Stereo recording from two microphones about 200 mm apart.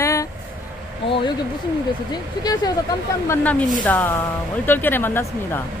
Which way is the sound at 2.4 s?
20° left (ahead or behind).